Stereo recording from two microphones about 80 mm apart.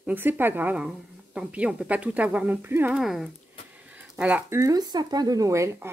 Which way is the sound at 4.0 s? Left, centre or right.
Centre.